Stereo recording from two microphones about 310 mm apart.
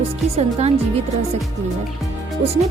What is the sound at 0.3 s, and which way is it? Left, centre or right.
Speech, centre.